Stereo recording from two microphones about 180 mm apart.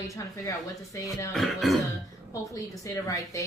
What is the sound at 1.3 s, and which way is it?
Throat clearing, centre (ahead or behind).